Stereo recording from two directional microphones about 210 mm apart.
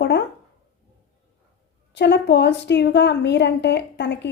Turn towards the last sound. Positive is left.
turn(degrees=55)  # may be behind; listen again after turning